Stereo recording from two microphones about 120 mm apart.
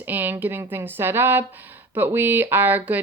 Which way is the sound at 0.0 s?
15° right (ahead or behind).